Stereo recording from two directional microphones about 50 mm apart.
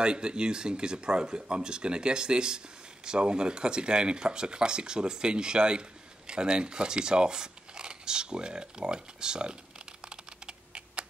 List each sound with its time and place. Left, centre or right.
0.0 s speech: centre